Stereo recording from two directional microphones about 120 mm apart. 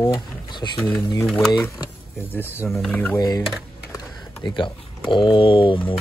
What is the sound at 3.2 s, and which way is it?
Speech, 30° left (ahead or behind).